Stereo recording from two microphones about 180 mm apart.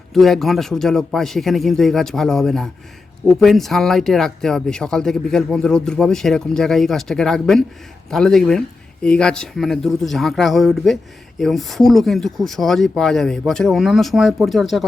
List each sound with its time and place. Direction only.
0.1 s speech: centre (ahead or behind)